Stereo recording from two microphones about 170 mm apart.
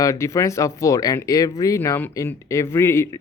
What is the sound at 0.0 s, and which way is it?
Speech, 20° left (ahead or behind).